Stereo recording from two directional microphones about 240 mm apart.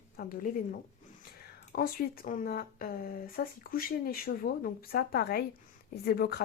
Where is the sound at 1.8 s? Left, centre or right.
Left.